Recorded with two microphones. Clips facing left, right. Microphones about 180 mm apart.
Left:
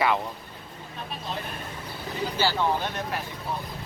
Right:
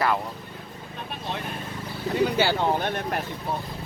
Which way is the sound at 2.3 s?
60° right (ahead or behind).